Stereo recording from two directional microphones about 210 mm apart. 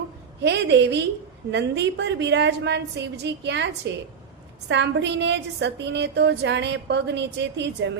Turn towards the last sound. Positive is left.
turn(degrees=-55)  # may be behind; listen again after turning